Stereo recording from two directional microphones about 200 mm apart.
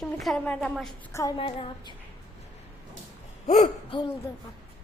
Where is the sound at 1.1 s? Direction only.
15° left (ahead or behind).